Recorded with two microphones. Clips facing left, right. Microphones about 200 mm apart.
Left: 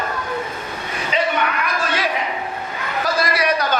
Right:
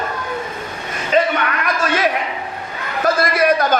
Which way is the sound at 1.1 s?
45° right (ahead or behind).